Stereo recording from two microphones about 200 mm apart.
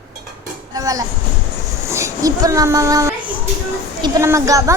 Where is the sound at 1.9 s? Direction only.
15° right (ahead or behind).